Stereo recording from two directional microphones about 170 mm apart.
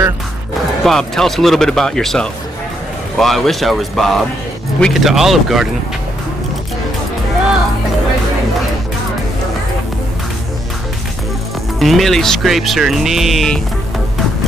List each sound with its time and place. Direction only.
0.8 s speech: centre (ahead or behind)
11.8 s speech: centre (ahead or behind)